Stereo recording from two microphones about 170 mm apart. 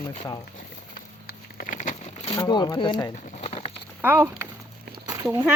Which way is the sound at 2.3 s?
25° left (ahead or behind).